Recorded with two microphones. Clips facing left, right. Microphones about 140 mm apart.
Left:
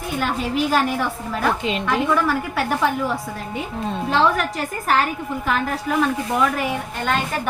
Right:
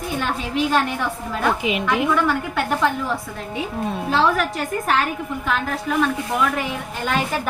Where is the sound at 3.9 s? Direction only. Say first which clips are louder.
Left 1 dB; 5° right (ahead or behind).